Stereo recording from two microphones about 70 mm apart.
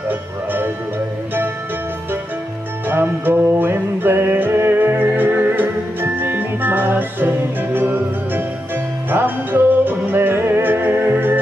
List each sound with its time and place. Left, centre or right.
0.1 s music: right
2.9 s music: right